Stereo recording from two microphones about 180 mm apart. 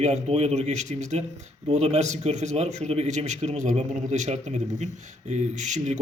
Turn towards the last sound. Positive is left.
turn(degrees=-40)  # may be behind; listen again after turning